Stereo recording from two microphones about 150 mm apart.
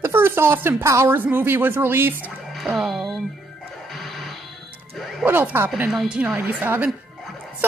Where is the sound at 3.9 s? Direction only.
Centre (ahead or behind).